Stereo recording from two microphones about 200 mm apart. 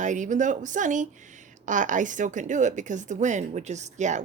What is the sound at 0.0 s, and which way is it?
A woman's voice, 40° right (ahead or behind).